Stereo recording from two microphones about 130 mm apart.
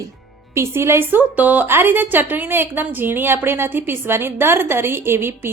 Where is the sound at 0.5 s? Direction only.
20° right (ahead or behind).